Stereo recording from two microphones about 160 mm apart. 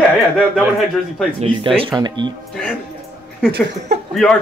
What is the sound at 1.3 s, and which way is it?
Speech, 35° right (ahead or behind).